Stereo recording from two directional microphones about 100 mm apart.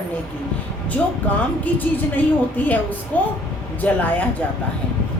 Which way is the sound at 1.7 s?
15° left (ahead or behind).